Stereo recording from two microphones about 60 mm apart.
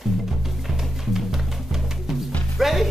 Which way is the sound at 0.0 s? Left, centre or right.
Centre.